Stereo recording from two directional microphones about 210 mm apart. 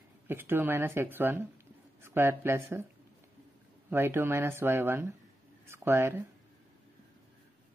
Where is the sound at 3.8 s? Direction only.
10° right (ahead or behind).